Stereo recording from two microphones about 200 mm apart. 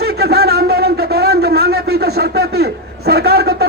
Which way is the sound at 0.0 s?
50° right (ahead or behind).